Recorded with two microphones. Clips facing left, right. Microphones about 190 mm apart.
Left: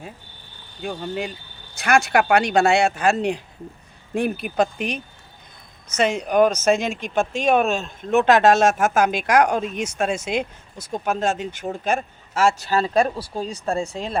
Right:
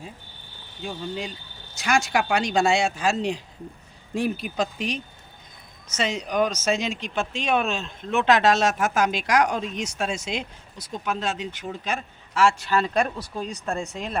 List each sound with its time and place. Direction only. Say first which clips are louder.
0.8 s speech: left 4 dB; 60° left (ahead or behind)
6.0 s speech: left 6 dB; 55° left (ahead or behind); by 14.2 s 30° left (ahead or behind)